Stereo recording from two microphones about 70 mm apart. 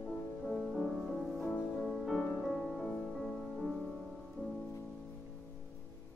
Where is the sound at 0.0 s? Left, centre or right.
Centre.